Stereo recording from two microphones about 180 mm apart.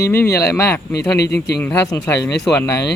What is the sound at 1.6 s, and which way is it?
Speech, 15° left (ahead or behind).